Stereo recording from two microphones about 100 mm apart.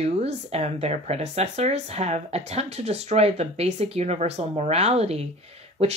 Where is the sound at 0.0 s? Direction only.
90° right.